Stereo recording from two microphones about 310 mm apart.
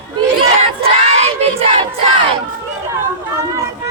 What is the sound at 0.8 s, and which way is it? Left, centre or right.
Child singing, centre.